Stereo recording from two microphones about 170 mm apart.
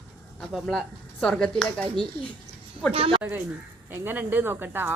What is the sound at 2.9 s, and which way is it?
Speech, 35° right (ahead or behind).